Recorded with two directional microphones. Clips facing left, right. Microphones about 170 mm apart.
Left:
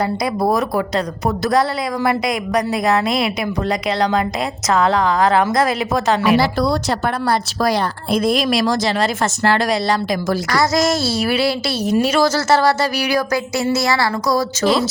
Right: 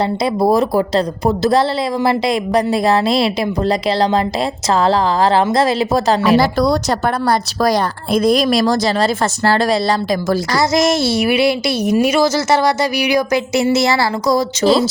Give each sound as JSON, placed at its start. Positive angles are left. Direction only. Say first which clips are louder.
{"t": 0.0, "sound": "a woman's voice", "louder": "right 3 dB", "side_deg": -25}